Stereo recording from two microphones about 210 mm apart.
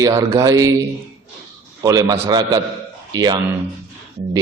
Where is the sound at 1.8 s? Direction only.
15° right (ahead or behind).